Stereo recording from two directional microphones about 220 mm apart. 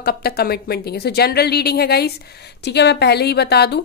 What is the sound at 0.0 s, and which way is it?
A woman's voice, 45° left (ahead or behind).